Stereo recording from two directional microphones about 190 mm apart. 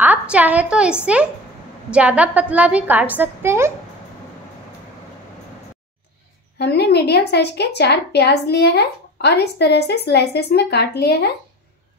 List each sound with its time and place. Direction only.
0.0 s a woman's voice: 10° right (ahead or behind)
6.6 s a woman's voice: 60° left (ahead or behind)